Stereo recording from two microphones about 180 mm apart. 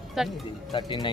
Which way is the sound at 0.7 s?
25° left (ahead or behind).